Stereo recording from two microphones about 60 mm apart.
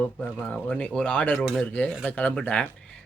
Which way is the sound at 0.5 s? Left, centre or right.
Centre.